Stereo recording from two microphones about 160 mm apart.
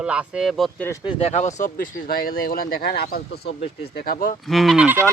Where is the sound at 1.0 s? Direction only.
35° left (ahead or behind); by 3.6 s 90° left.